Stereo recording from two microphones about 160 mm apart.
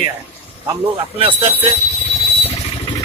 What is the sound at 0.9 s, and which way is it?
Speech, 35° right (ahead or behind).